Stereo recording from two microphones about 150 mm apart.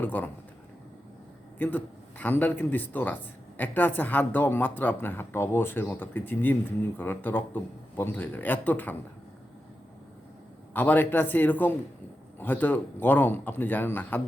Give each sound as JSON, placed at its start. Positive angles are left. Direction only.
{"t": 0.0, "sound": "speech", "side_deg": 10}
{"t": 1.5, "sound": "speech", "side_deg": 10}
{"t": 10.8, "sound": "speech", "side_deg": 10}